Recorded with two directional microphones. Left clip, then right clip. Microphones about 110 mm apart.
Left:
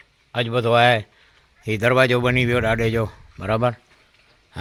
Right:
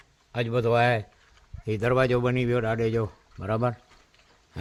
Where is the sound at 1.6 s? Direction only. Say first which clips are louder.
Left 6 dB; 25° left (ahead or behind).